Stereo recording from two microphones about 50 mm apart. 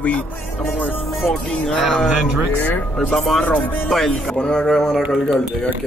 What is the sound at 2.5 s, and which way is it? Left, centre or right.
Speech, left.